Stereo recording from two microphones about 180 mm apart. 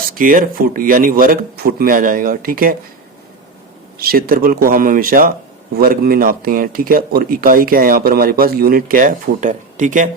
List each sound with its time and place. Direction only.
0.1 s speech: 50° right (ahead or behind)
3.9 s speech: 55° right (ahead or behind)